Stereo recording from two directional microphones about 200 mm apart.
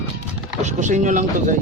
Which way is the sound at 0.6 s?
35° right (ahead or behind).